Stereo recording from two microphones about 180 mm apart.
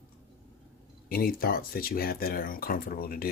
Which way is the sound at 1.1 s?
55° left (ahead or behind).